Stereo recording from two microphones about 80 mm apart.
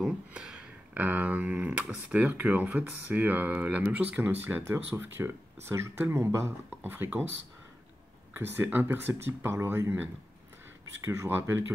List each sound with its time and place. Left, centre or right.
0.0 s a sound: centre
0.9 s speech: right
8.6 s speech: right